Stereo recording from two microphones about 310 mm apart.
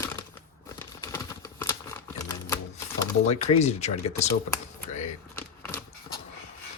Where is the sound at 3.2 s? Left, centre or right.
Left.